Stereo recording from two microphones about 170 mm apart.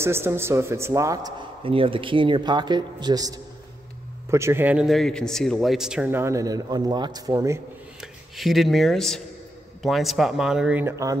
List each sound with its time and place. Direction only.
0.0 s a man's voice: 15° right (ahead or behind)
1.6 s a man's voice: 30° right (ahead or behind)
8.0 s speech: centre (ahead or behind); by 11.1 s 15° right (ahead or behind)